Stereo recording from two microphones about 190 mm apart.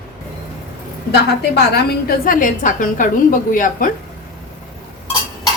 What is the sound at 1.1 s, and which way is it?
A woman's voice, 55° left (ahead or behind).